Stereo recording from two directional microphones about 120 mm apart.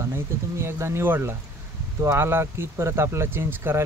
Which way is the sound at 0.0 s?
20° right (ahead or behind).